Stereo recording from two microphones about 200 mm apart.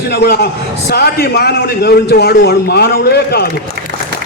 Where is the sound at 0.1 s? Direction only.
50° left (ahead or behind).